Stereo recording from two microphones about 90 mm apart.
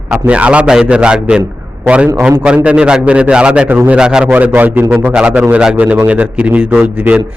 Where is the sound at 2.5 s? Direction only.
15° right (ahead or behind).